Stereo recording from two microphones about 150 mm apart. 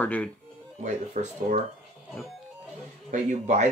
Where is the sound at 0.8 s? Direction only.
55° right (ahead or behind).